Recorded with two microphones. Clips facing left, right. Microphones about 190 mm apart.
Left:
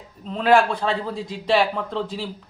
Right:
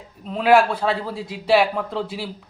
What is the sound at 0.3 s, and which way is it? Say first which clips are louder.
Speech: right 1 dB; 5° right (ahead or behind).